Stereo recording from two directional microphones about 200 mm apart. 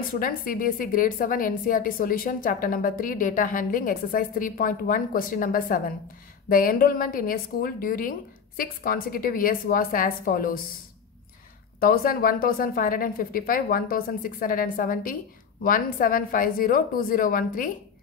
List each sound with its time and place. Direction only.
0.1 s a woman's voice: 45° left (ahead or behind)
11.8 s a woman's voice: 45° left (ahead or behind)